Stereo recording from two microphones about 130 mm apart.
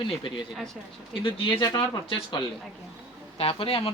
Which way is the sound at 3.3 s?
45° left (ahead or behind).